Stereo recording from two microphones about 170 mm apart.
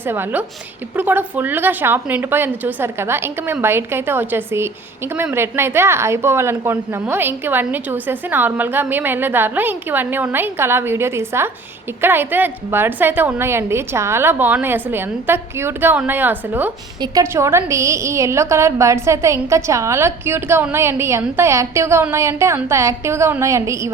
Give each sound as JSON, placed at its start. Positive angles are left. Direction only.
{"t": 0.0, "sound": "a woman's voice", "side_deg": -10}